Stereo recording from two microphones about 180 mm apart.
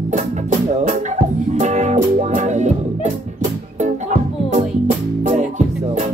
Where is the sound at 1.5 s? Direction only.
40° right (ahead or behind).